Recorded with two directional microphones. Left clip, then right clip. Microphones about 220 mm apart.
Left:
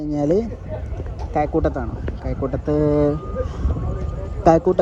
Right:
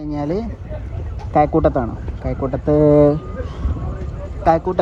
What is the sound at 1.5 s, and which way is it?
Speech, 25° right (ahead or behind).